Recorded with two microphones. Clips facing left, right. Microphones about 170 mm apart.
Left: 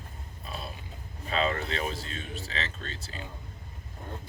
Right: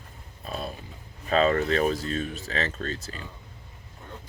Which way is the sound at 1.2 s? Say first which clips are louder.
Right 7 dB; 40° right (ahead or behind).